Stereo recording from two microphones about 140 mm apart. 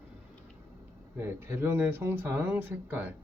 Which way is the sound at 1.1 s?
15° right (ahead or behind).